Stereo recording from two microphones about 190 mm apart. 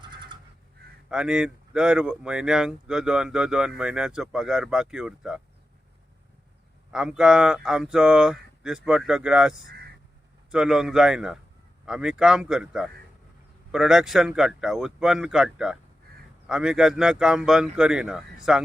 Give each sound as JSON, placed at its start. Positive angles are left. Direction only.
{"t": 0.0, "sound": "crow", "side_deg": -25}
{"t": 1.1, "sound": "speech", "side_deg": -5}
{"t": 6.9, "sound": "speech", "side_deg": -5}